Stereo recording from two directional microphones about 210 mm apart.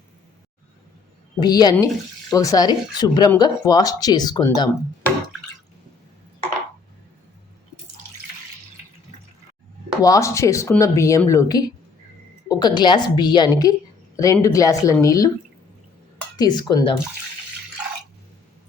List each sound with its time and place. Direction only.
1.4 s a woman's voice: 20° left (ahead or behind)
10.0 s a woman's voice: 15° left (ahead or behind)
16.4 s a woman's voice: 20° left (ahead or behind)